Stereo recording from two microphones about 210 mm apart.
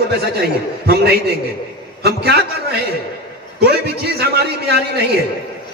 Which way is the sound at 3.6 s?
50° right (ahead or behind).